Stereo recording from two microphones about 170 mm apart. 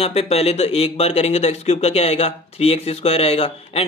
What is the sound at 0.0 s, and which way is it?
Speech, 35° left (ahead or behind).